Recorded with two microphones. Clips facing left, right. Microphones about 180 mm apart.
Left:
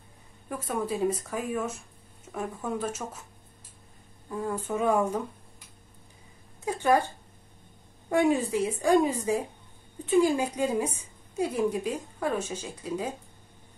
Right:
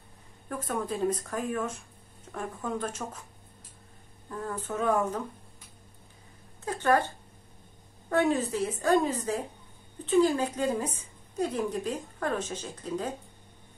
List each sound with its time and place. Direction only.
0.5 s speech: 10° left (ahead or behind)
4.3 s speech: 10° left (ahead or behind)
6.6 s speech: 10° left (ahead or behind)
8.1 s speech: 10° left (ahead or behind)